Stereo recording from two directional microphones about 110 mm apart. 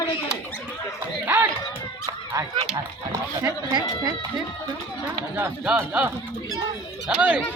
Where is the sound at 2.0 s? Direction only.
30° right (ahead or behind).